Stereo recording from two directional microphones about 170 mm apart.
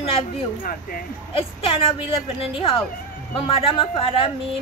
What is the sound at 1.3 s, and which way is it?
A woman's voice, 35° left (ahead or behind).